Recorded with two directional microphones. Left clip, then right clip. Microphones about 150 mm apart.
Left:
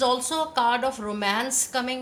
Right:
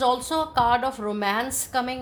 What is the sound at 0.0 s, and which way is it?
A woman's voice, 40° right (ahead or behind).